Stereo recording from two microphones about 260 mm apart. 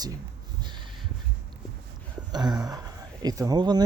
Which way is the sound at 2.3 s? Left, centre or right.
Centre.